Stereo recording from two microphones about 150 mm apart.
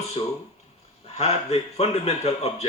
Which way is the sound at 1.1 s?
45° left (ahead or behind).